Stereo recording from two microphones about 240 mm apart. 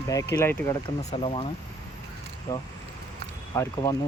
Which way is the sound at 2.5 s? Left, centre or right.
Centre.